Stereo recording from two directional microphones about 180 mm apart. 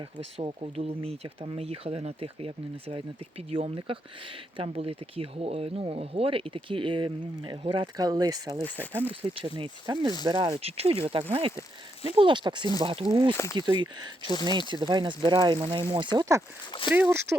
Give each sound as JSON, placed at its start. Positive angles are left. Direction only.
{"t": 0.0, "sound": "speech", "side_deg": -30}
{"t": 8.5, "sound": "speech", "side_deg": 10}
{"t": 9.2, "sound": "speech", "side_deg": -30}
{"t": 13.3, "sound": "speech", "side_deg": 15}
{"t": 13.6, "sound": "speech", "side_deg": -25}
{"t": 16.9, "sound": "speech", "side_deg": -10}